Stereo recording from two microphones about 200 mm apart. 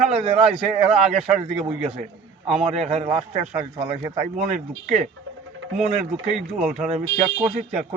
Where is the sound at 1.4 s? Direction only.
30° right (ahead or behind).